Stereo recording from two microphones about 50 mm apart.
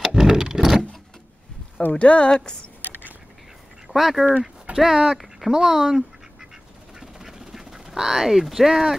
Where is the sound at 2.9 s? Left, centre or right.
Right.